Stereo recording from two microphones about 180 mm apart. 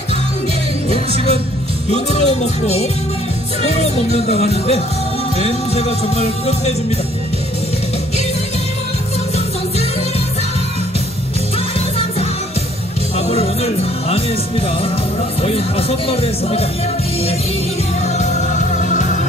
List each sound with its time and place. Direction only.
0.8 s music: 35° left (ahead or behind)
13.2 s music: 35° left (ahead or behind)
15.4 s music: 35° left (ahead or behind)
18.0 s music: 40° left (ahead or behind)